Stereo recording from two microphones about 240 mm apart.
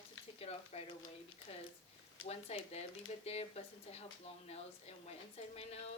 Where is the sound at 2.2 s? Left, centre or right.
Left.